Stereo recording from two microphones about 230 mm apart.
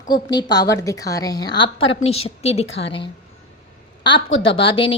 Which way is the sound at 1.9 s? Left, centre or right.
Left.